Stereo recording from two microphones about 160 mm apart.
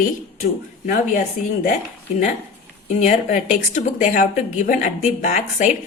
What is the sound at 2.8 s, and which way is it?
Speech, 50° left (ahead or behind).